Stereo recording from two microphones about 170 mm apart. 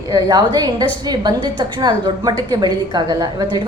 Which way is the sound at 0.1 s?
20° right (ahead or behind).